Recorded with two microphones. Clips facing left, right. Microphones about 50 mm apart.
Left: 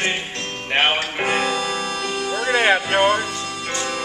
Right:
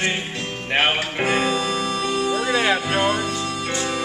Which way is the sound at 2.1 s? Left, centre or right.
Centre.